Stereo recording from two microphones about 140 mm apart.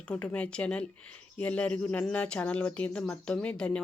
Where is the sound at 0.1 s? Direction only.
10° left (ahead or behind).